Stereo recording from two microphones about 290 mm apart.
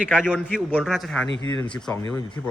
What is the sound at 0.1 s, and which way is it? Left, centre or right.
A man's voice, centre.